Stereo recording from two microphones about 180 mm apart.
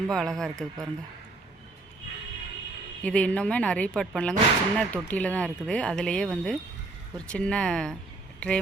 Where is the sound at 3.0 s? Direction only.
5° left (ahead or behind).